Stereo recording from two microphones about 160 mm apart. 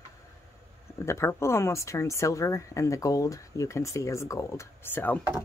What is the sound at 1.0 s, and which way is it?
Speech, 20° left (ahead or behind).